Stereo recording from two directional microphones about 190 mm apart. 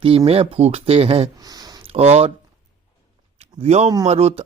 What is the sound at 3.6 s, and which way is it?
Speech, 35° right (ahead or behind).